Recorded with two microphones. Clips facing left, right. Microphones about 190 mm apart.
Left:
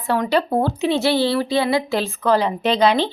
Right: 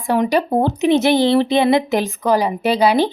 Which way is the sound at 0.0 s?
15° right (ahead or behind).